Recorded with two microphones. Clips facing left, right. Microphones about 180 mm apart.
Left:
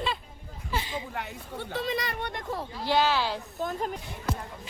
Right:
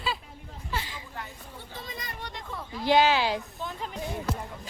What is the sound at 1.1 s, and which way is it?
Speech, 70° left (ahead or behind).